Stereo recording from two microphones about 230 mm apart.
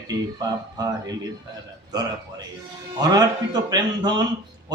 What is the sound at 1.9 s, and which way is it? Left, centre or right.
Speech, centre.